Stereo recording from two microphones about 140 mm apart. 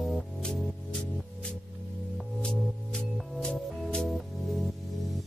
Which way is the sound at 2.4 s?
5° left (ahead or behind).